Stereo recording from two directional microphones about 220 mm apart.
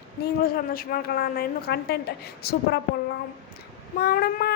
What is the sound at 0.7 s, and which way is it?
Child singing, 40° left (ahead or behind).